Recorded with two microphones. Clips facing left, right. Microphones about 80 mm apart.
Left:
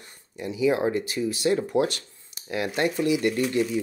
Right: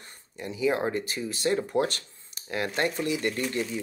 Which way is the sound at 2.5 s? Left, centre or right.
Right.